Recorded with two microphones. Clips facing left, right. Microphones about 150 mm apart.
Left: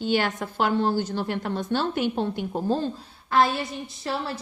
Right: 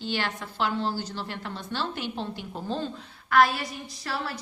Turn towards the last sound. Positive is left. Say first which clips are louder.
# left 3 dB
turn(degrees=25)  # may be behind; listen again after turning